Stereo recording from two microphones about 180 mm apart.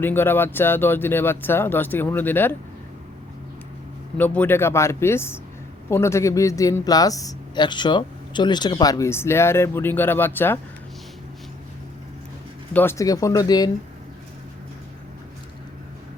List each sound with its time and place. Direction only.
0.0 s speech: 10° left (ahead or behind)
4.2 s speech: 10° left (ahead or behind)
12.7 s speech: 15° left (ahead or behind)